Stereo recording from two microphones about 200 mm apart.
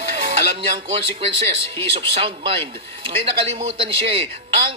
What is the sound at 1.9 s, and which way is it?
Speech, 25° right (ahead or behind).